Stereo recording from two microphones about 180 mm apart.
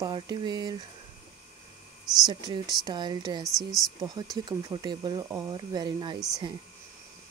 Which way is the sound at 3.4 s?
Centre (ahead or behind).